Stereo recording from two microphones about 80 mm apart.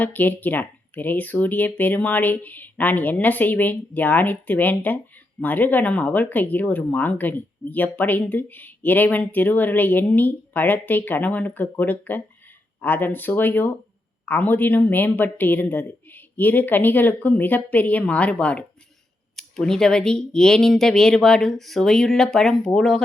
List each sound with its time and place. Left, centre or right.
0.0 s speech: left; by 23.0 s centre